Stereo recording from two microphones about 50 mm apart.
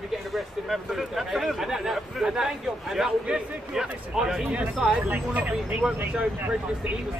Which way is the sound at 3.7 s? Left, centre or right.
Centre.